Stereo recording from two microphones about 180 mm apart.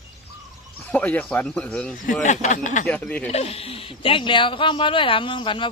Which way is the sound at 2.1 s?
40° left (ahead or behind).